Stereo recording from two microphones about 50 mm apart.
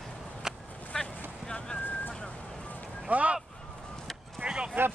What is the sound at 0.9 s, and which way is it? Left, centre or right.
Boat, centre.